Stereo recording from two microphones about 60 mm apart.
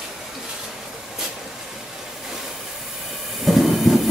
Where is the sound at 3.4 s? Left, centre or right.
Centre.